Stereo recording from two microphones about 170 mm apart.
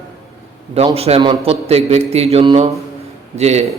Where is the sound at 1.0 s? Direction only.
35° right (ahead or behind).